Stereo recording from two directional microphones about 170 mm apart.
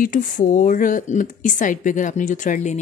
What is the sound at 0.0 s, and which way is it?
Speech, 50° left (ahead or behind).